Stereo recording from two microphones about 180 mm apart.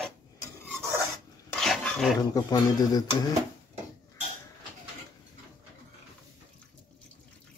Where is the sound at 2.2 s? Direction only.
20° left (ahead or behind).